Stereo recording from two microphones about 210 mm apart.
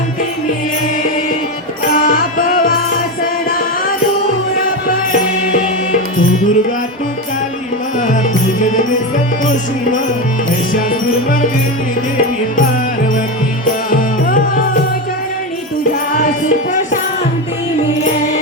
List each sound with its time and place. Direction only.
1.9 s music: 40° left (ahead or behind)
8.5 s music: 35° left (ahead or behind)
13.9 s music: 40° left (ahead or behind)
16.1 s music: 40° left (ahead or behind)